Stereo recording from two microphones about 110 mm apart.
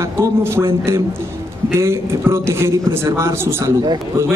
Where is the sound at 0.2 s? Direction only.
25° right (ahead or behind).